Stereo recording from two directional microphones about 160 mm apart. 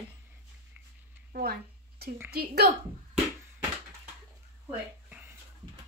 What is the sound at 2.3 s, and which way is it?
Speech, 85° right.